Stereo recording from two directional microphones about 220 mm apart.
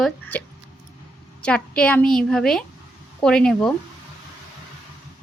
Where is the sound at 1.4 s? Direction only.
5° left (ahead or behind).